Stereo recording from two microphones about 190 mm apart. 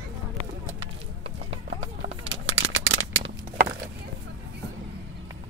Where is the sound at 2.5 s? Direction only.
90° right.